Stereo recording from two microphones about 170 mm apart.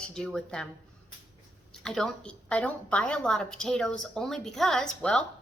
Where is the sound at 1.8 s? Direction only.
5° left (ahead or behind).